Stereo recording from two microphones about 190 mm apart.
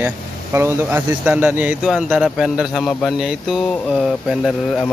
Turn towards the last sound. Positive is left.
turn(degrees=0)  # may be behind; listen again after turning